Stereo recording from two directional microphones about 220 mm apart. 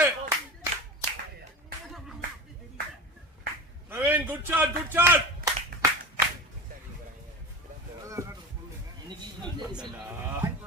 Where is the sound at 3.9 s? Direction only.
5° right (ahead or behind).